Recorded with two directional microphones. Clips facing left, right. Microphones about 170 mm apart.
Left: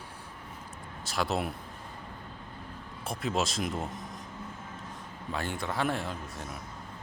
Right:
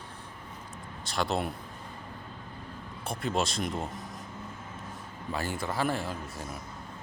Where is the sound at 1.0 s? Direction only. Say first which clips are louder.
Right 1 dB; 5° left (ahead or behind).